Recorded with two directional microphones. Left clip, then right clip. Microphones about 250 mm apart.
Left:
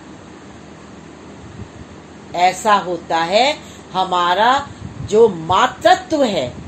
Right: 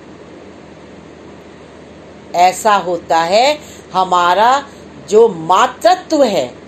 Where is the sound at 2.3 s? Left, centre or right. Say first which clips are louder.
Right 3 dB; centre.